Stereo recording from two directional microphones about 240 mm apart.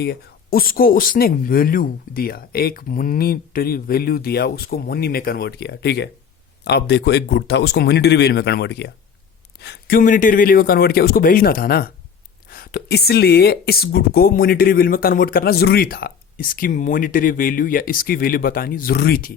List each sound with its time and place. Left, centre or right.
0.0 s a man's voice: left